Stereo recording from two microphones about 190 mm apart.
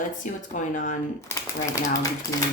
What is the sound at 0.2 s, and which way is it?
Speech, 40° left (ahead or behind).